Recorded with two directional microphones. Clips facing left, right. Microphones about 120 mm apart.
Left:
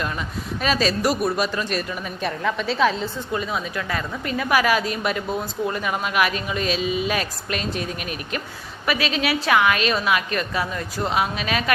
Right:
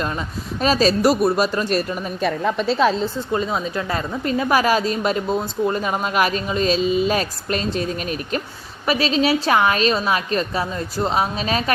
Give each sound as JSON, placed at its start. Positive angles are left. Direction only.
{"t": 0.6, "sound": "a woman's voice", "side_deg": -35}